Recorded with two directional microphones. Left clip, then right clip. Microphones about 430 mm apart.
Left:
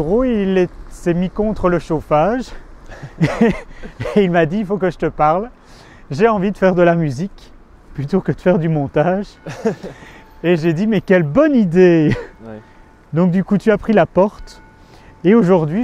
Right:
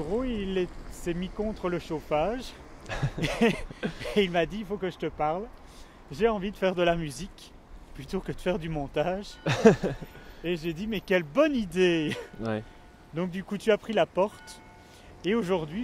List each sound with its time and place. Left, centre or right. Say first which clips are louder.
0.1 s speech: left 15 dB; left
9.4 s speech: right 1 dB; right
10.0 s speech: left 15 dB; left